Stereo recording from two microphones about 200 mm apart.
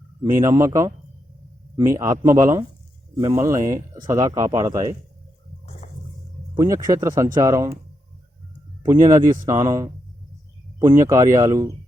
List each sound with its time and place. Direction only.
0.2 s speech: 15° right (ahead or behind)
5.8 s music: 35° left (ahead or behind)
6.6 s speech: 15° right (ahead or behind)
8.8 s speech: 15° right (ahead or behind)